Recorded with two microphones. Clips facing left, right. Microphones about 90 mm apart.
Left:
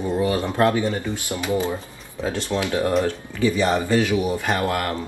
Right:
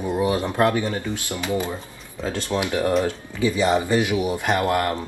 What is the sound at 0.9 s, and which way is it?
Speech, 20° left (ahead or behind).